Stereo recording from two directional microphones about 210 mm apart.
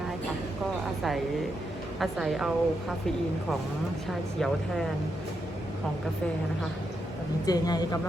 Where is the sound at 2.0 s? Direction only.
Centre (ahead or behind).